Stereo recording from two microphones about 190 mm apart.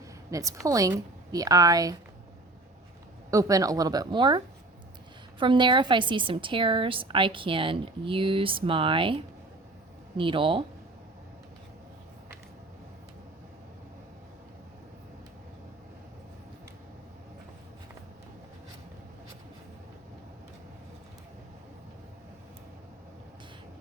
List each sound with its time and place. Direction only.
0.3 s a woman's voice: 15° right (ahead or behind)
3.2 s a woman's voice: 15° right (ahead or behind)